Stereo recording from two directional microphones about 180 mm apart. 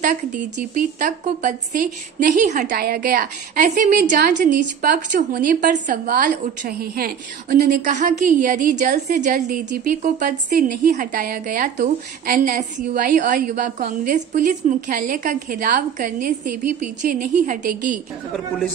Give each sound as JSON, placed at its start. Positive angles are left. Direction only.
{"t": 0.0, "sound": "a woman's voice", "side_deg": -45}